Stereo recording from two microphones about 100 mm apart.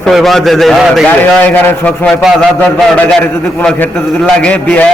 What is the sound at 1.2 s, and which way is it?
A man's voice, 15° left (ahead or behind).